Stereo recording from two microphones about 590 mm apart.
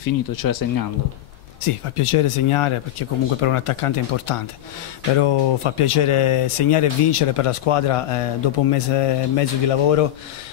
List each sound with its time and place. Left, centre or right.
0.0 s speech: left
1.6 s speech: left